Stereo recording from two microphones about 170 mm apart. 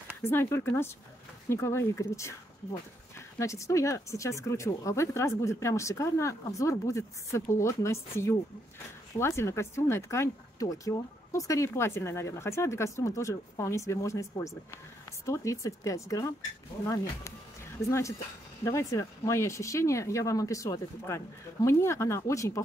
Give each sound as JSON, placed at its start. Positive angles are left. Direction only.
{"t": 0.2, "sound": "speech", "side_deg": 15}